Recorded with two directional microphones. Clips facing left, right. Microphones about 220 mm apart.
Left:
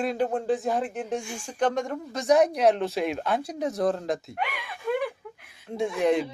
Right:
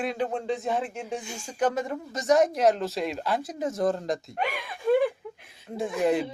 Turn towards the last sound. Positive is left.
turn(degrees=0)  # may be behind; listen again after turning